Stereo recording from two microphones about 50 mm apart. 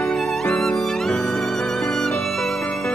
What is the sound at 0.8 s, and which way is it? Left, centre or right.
Violin, centre.